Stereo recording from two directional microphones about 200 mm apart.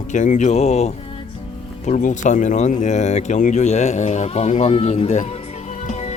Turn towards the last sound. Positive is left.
turn(degrees=35)  # may be behind; listen again after turning